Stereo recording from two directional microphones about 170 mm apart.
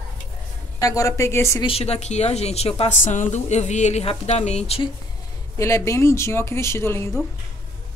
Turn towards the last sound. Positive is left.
turn(degrees=15)  # may be behind; listen again after turning